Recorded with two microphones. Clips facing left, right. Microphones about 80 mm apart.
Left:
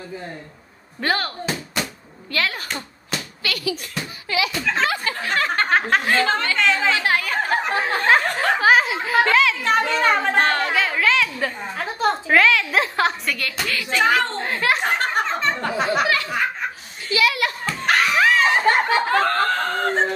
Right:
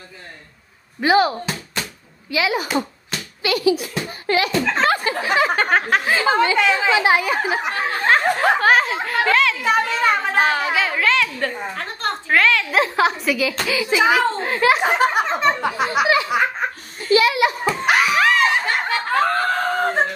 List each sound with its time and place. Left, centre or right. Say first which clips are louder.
1.0 s a woman's voice: right 8 dB; centre
2.3 s a woman's voice: right 5 dB; centre
3.4 s snicker: right 9 dB; right
3.7 s a woman's voice: right 7 dB; centre
4.3 s speech: right 5 dB; right
5.1 s a woman's voice: right 4 dB; centre
16.1 s snicker: right 4 dB; centre
17.1 s a sound: right 5 dB; right
17.4 s snicker: right 6 dB; centre